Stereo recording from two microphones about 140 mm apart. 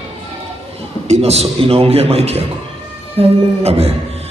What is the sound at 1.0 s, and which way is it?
A man's voice, 50° right (ahead or behind).